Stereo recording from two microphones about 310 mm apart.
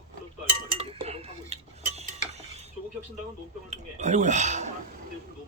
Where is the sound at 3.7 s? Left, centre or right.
Right.